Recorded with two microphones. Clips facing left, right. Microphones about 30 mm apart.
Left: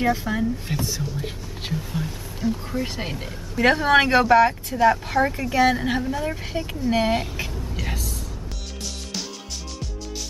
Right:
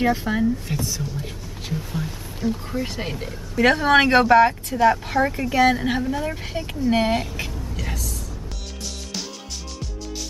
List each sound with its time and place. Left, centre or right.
0.0 s speech: centre
0.7 s speech: centre
1.7 s speech: centre
7.7 s vehicle: centre
9.8 s music: centre